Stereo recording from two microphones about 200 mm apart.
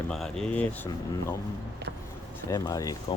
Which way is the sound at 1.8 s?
60° right (ahead or behind).